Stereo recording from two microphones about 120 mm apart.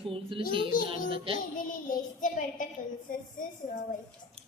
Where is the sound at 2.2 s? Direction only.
90° left.